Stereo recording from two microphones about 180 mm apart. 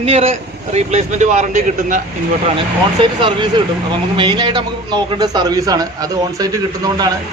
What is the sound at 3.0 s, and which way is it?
A man's voice, 25° right (ahead or behind).